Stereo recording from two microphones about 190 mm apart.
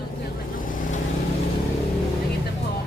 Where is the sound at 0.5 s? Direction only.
45° left (ahead or behind).